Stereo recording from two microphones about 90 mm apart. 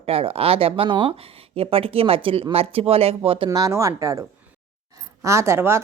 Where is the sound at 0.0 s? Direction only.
90° right.